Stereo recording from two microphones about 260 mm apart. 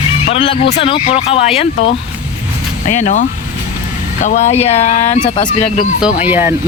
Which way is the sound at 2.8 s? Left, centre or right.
Left.